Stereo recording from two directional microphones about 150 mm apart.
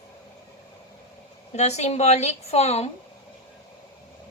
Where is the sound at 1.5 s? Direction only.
45° left (ahead or behind).